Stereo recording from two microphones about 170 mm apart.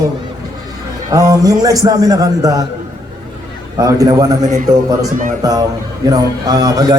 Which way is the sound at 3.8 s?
20° right (ahead or behind).